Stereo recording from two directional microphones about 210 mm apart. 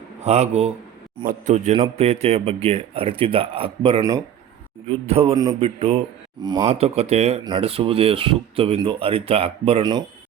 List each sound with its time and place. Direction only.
0.3 s a man's voice: 30° right (ahead or behind)
5.3 s speech: 20° right (ahead or behind)
5.5 s speech: 30° right (ahead or behind)